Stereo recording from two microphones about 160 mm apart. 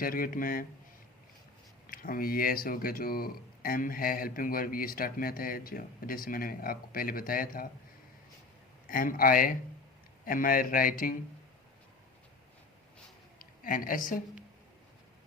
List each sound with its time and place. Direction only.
0.0 s speech: 60° left (ahead or behind)
1.9 s speech: 65° left (ahead or behind)
8.9 s speech: 60° left (ahead or behind)
13.4 s speech: 60° left (ahead or behind)